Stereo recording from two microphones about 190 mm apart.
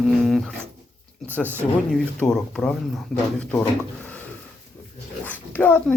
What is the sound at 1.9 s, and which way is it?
Speech, centre (ahead or behind).